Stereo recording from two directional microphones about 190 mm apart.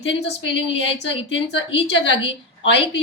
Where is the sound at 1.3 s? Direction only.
65° left (ahead or behind).